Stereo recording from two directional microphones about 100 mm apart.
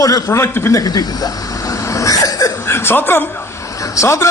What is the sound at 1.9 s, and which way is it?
Cough, 35° left (ahead or behind).